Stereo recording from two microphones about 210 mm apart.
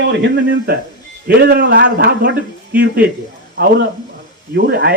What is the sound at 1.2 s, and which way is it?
Speech, 50° right (ahead or behind).